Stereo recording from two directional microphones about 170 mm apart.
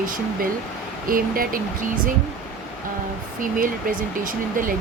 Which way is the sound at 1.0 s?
55° right (ahead or behind).